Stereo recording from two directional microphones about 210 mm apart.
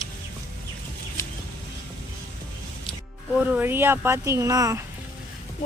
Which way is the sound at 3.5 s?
10° right (ahead or behind).